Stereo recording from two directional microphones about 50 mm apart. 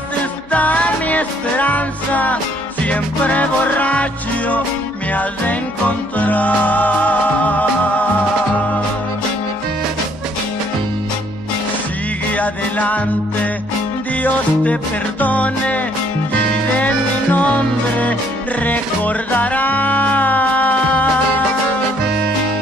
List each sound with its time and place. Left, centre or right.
0.5 s music: left
12.4 s music: left
14.2 s music: left